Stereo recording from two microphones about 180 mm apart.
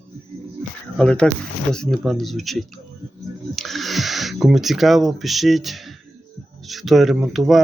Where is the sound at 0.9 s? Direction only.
5° left (ahead or behind).